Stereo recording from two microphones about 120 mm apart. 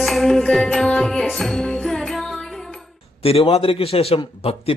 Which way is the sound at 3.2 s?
55° left (ahead or behind).